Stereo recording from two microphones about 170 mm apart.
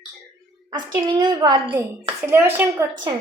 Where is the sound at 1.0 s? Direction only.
25° right (ahead or behind).